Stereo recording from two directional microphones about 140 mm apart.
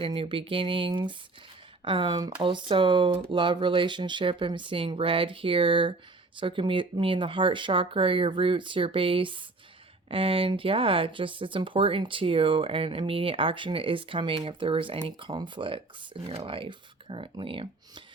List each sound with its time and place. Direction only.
0.0 s speech: 40° right (ahead or behind)